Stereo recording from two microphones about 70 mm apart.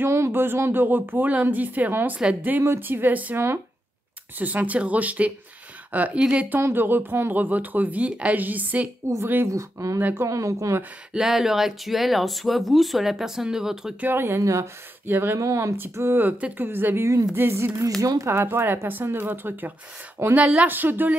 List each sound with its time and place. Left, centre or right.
0.0 s speech: right
4.4 s speech: right
6.7 s speech: right
9.5 s speech: right
9.9 s speech: right
10.2 s speech: right
11.1 s speech: centre
14.0 s speech: right
14.4 s speech: right
15.0 s speech: right
15.3 s speech: right
15.9 s speech: right
20.3 s speech: centre
20.6 s speech: right